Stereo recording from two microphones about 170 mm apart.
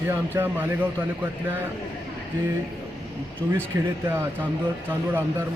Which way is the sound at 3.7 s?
15° right (ahead or behind).